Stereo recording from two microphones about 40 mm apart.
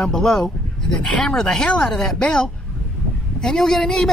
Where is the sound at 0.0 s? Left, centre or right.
Centre.